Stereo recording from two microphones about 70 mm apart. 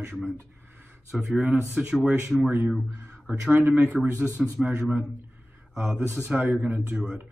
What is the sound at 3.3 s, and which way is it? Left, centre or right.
Speech, right.